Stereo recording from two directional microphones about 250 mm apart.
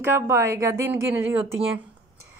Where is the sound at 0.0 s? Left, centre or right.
Centre.